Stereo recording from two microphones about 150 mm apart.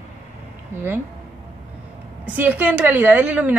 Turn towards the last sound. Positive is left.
turn(degrees=-10)  # may be behind; listen again after turning